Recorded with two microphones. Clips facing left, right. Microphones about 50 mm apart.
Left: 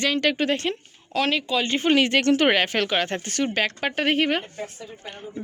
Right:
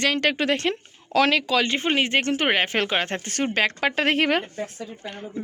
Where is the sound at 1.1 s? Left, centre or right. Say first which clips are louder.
Right 3 dB; right.